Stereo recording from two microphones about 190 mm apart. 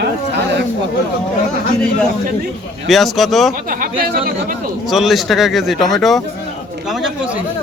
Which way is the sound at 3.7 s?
45° right (ahead or behind).